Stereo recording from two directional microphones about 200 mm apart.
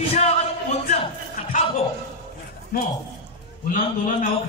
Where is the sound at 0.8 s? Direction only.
40° left (ahead or behind).